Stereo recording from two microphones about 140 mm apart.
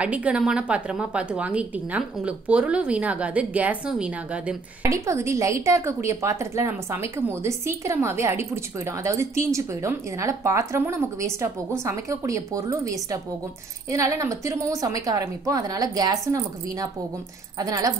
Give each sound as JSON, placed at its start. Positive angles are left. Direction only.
{"t": 0.0, "sound": "a woman's voice", "side_deg": -10}
{"t": 4.8, "sound": "a woman's voice", "side_deg": -20}